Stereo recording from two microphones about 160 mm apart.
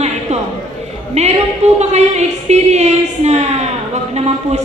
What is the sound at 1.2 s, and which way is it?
Speech, 45° right (ahead or behind).